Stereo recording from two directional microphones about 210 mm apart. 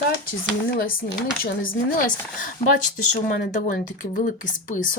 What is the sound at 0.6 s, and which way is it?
Speech, 45° left (ahead or behind).